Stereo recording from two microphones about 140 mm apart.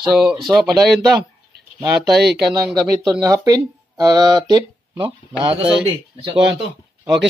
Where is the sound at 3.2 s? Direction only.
25° right (ahead or behind).